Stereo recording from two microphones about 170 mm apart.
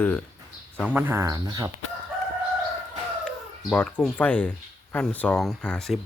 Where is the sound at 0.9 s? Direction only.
10° right (ahead or behind).